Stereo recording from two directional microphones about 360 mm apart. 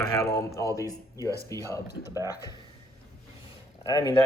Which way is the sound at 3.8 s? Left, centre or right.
Centre.